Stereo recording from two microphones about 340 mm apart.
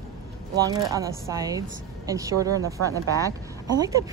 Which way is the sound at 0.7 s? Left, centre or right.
Centre.